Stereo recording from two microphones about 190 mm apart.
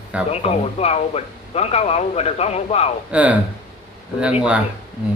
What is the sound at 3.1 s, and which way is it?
A man's voice, 5° right (ahead or behind).